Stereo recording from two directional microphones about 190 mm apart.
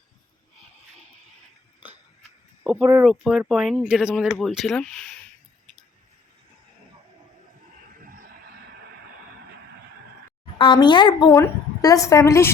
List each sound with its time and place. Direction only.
3.0 s speech: 5° right (ahead or behind)
8.0 s a sound: 50° right (ahead or behind)
10.6 s a woman's voice: 25° left (ahead or behind)